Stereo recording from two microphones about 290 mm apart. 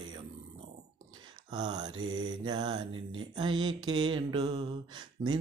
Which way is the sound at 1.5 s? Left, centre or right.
Centre.